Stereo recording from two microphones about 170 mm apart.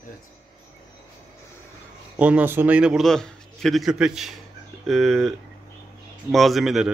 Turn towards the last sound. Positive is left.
turn(degrees=0)  # may be behind; listen again after turning